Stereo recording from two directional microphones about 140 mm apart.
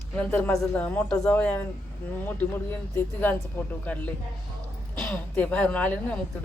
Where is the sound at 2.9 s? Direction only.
15° left (ahead or behind).